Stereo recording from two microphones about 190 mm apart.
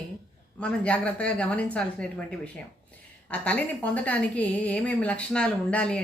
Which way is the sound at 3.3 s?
5° left (ahead or behind).